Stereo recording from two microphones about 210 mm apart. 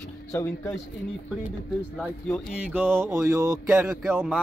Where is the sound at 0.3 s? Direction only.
10° left (ahead or behind).